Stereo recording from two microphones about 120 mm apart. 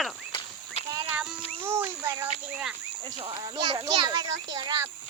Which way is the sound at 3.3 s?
35° right (ahead or behind).